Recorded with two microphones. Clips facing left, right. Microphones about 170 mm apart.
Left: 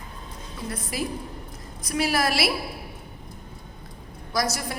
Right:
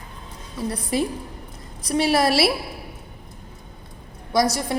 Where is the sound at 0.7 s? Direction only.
30° right (ahead or behind).